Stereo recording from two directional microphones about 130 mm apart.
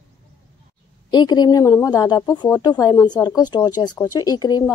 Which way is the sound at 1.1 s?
35° left (ahead or behind).